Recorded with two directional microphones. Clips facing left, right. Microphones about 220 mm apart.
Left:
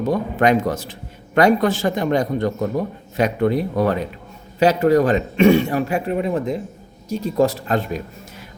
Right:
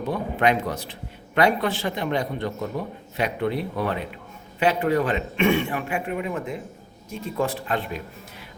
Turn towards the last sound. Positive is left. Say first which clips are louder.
# left 5 dB
turn(degrees=40)  # may be behind; listen again after turning